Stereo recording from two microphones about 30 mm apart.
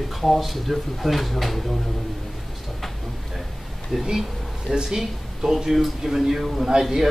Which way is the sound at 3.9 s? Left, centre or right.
Centre.